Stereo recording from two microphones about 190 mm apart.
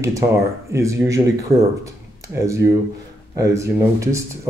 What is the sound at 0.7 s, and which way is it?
Speech, 15° right (ahead or behind).